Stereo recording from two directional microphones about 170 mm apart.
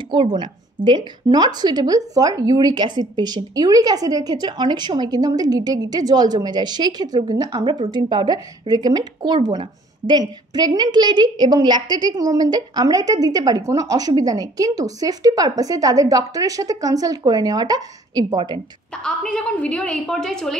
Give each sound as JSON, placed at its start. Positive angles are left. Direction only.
{"t": 0.1, "sound": "speech", "side_deg": -30}
{"t": 18.9, "sound": "a woman's voice", "side_deg": 5}